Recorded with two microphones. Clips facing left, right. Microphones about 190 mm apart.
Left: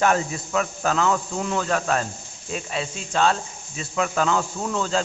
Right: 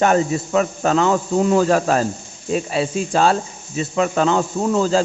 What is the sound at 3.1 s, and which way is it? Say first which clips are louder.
Speech: right 3 dB; 35° right (ahead or behind).